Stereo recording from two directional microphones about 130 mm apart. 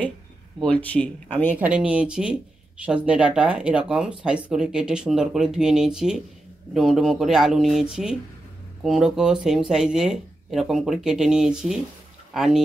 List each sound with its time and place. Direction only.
0.7 s speech: 10° left (ahead or behind)
1.6 s speech: 10° right (ahead or behind)